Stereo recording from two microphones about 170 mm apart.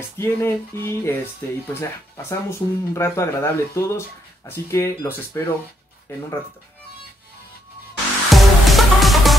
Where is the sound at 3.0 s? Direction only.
15° left (ahead or behind).